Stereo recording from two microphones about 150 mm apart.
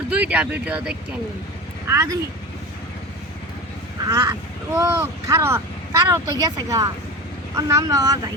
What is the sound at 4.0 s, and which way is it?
Speech, 25° right (ahead or behind).